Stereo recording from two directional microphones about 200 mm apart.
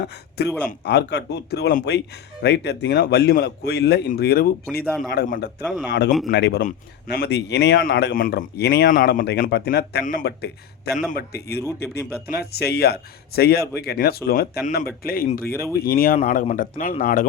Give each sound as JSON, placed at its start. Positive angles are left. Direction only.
{"t": 0.4, "sound": "a man's voice", "side_deg": 55}
{"t": 5.6, "sound": "a man's voice", "side_deg": 0}
{"t": 6.3, "sound": "speech", "side_deg": 55}
{"t": 6.6, "sound": "a man's voice", "side_deg": 45}
{"t": 11.8, "sound": "speech", "side_deg": 10}
{"t": 12.4, "sound": "a man's voice", "side_deg": 50}